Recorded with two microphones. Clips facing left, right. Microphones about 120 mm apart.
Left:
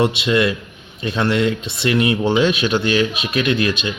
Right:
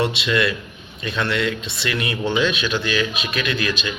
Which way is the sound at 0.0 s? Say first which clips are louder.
Left 4 dB; 25° left (ahead or behind).